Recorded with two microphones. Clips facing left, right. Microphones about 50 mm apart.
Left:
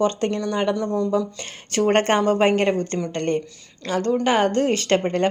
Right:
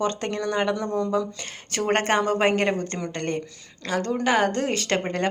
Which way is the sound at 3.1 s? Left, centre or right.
Centre.